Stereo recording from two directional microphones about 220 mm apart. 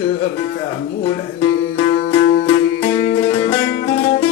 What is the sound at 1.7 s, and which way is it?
Music, 25° left (ahead or behind).